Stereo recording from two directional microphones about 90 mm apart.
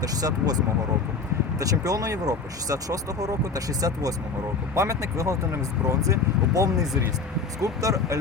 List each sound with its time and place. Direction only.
0.0 s speech: 45° right (ahead or behind)
1.5 s speech: 40° right (ahead or behind)